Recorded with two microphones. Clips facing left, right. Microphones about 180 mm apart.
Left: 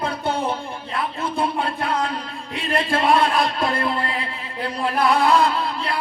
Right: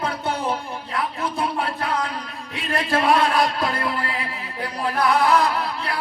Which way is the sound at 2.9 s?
25° left (ahead or behind).